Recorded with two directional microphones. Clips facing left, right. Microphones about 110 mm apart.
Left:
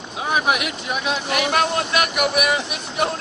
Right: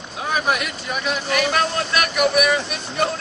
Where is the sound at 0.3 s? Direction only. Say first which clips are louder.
Left 1 dB; 15° left (ahead or behind).